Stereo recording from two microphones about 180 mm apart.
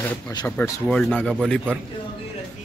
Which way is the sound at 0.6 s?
5° left (ahead or behind).